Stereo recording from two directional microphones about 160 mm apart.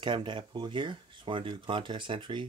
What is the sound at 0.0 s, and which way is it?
Speech, 30° right (ahead or behind).